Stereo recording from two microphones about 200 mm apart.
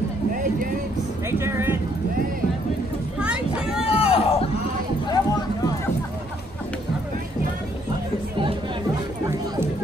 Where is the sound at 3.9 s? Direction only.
30° left (ahead or behind).